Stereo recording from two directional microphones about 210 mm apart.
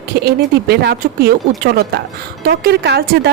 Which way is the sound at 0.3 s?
50° right (ahead or behind).